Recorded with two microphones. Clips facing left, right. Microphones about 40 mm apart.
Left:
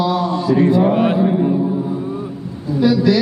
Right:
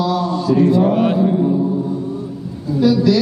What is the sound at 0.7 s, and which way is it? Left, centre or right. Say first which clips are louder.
Speech: even; centre.